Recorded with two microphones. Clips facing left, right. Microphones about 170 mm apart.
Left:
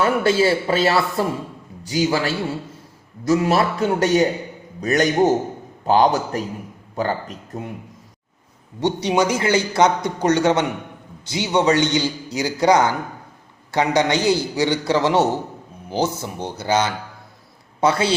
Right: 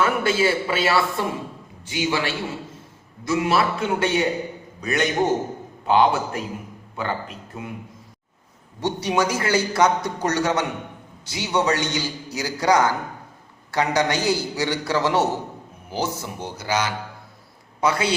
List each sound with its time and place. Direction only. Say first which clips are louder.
0.0 s a man's voice: left 3 dB; 35° left (ahead or behind)
8.8 s a man's voice: left 3 dB; 20° left (ahead or behind)